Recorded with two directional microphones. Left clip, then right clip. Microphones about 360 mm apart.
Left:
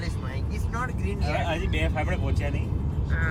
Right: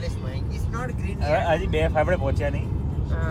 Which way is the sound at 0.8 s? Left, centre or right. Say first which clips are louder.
Even; centre.